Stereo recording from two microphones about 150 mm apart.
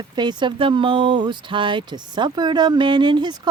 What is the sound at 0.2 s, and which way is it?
Speech, 30° right (ahead or behind).